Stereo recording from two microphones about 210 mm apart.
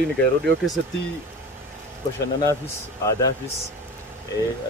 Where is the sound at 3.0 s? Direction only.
15° left (ahead or behind).